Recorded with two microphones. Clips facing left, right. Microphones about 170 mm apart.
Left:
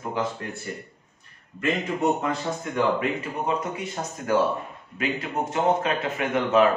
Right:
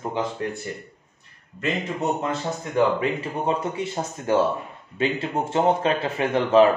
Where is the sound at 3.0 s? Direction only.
30° right (ahead or behind).